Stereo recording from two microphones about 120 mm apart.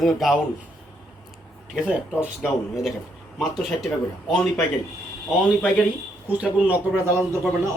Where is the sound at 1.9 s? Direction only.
5° right (ahead or behind).